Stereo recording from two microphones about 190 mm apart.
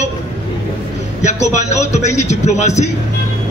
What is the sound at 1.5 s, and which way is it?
A man's voice, 35° left (ahead or behind).